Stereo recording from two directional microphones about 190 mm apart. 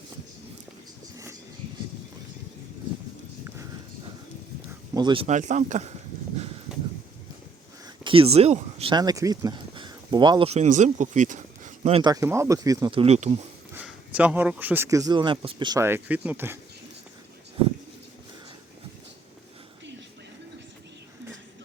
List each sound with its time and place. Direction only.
4.9 s speech: 25° right (ahead or behind)
6.7 s a sound: 5° right (ahead or behind)
8.0 s speech: 30° right (ahead or behind)
12.1 s speech: 15° right (ahead or behind); by 13.4 s 35° right (ahead or behind)
13.7 s speech: 5° right (ahead or behind)